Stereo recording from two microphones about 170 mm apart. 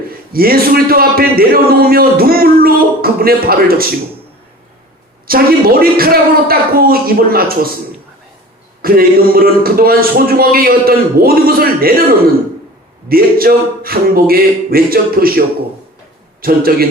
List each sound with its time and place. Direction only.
0.3 s a man's voice: 60° right (ahead or behind)
5.3 s a man's voice: 60° right (ahead or behind)
8.8 s a man's voice: 60° right (ahead or behind)
13.1 s a man's voice: 60° right (ahead or behind)